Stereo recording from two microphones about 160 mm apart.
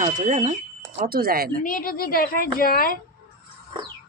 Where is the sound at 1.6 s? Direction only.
60° left (ahead or behind).